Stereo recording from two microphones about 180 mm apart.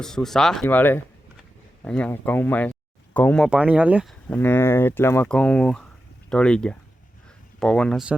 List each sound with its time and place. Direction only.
0.0 s speech: 5° left (ahead or behind)
3.5 s speech: 5° right (ahead or behind)
4.3 s speech: 10° left (ahead or behind)